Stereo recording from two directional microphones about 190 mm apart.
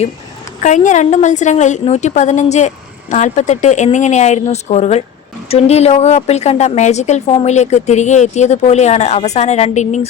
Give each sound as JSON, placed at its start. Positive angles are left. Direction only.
{"t": 0.6, "sound": "a woman's voice", "side_deg": 40}